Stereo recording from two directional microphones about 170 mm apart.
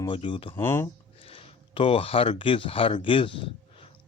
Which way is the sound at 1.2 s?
35° left (ahead or behind).